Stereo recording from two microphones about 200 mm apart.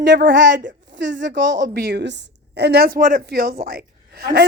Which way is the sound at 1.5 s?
45° right (ahead or behind).